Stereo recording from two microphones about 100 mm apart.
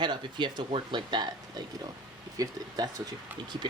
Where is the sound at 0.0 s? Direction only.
50° right (ahead or behind).